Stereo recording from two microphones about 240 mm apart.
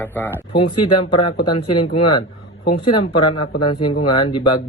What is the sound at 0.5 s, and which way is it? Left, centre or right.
A man's voice, centre.